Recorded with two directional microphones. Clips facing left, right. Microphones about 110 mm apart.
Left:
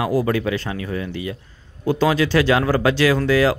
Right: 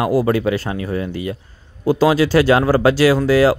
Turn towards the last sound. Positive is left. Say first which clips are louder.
# right 4 dB
turn(degrees=-35)  # may be behind; listen again after turning